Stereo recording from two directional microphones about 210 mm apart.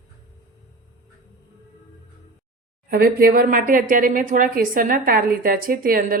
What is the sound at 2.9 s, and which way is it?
A woman's voice, 45° right (ahead or behind).